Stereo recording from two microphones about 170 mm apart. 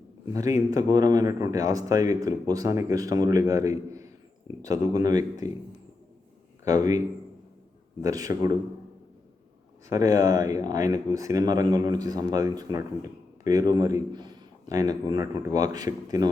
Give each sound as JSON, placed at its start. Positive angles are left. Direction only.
{"t": 0.3, "sound": "speech", "side_deg": -20}
{"t": 6.7, "sound": "speech", "side_deg": -20}
{"t": 8.0, "sound": "speech", "side_deg": -20}
{"t": 9.9, "sound": "speech", "side_deg": -20}